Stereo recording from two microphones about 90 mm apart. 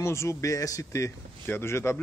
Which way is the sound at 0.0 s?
30° left (ahead or behind).